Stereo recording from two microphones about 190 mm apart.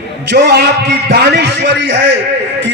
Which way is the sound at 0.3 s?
55° right (ahead or behind).